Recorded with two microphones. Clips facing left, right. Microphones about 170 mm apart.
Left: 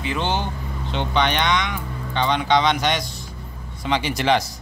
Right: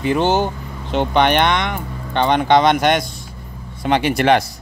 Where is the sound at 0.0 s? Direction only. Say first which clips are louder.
Right 8 dB; 45° right (ahead or behind).